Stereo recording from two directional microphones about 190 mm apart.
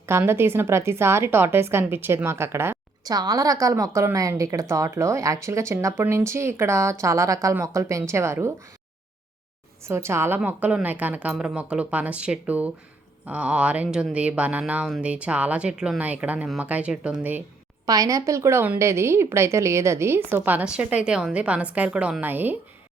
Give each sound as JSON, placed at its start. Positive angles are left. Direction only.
{"t": 0.0, "sound": "a woman's voice", "side_deg": -15}
{"t": 9.8, "sound": "a woman's voice", "side_deg": -15}
{"t": 17.8, "sound": "a woman's voice", "side_deg": -20}